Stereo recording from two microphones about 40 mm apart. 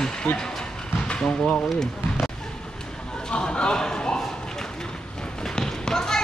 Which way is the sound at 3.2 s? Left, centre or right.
Left.